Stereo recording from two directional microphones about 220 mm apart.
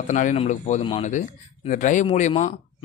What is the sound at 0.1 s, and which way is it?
Speech, 35° left (ahead or behind).